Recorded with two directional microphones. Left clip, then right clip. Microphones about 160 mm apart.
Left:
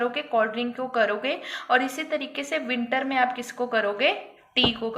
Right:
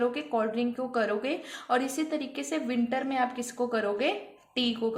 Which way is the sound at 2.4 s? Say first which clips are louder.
Left 3 dB; 35° right (ahead or behind).